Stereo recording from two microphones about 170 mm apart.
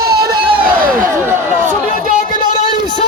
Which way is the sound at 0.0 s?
65° right (ahead or behind).